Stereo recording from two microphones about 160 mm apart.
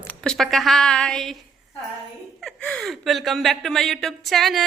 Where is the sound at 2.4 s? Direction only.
5° left (ahead or behind).